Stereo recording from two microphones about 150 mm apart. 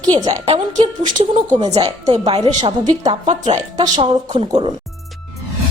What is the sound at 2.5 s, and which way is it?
Speech, 30° right (ahead or behind).